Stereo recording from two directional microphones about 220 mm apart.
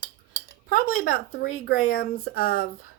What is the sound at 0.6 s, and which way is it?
Speech, 40° left (ahead or behind).